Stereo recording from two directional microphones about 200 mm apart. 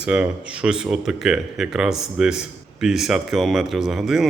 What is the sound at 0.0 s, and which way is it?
Speech, 5° right (ahead or behind).